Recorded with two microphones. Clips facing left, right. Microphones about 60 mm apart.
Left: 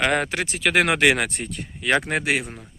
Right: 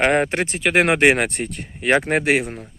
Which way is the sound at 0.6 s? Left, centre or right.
Right.